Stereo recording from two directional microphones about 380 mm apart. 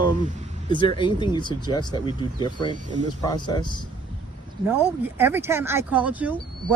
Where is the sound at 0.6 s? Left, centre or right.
Centre.